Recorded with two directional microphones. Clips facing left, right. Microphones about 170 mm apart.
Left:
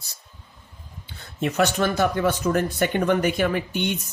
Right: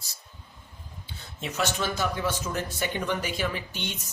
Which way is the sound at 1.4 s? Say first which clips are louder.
Left 8 dB; 55° left (ahead or behind).